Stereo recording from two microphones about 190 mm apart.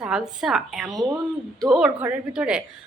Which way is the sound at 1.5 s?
Centre (ahead or behind).